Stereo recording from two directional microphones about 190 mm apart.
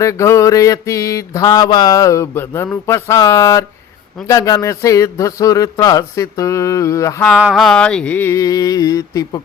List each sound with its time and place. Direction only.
0.0 s mantra: 15° left (ahead or behind)
7.3 s mantra: 5° right (ahead or behind); by 9.4 s 20° left (ahead or behind)